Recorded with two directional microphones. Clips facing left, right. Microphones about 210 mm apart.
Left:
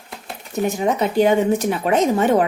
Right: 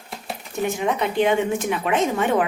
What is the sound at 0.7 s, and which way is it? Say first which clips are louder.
A woman's voice: left 3 dB; 40° left (ahead or behind).